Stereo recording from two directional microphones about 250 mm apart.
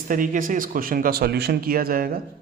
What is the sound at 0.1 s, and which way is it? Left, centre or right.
Speech, right.